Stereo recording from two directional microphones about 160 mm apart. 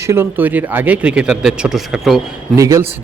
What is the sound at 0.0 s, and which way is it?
A man's voice, 15° right (ahead or behind).